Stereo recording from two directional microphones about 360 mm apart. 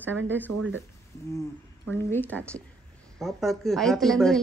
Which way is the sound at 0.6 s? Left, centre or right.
Right.